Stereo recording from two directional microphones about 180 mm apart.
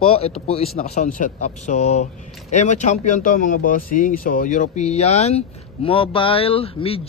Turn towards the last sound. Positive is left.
turn(degrees=30)  # may be behind; listen again after turning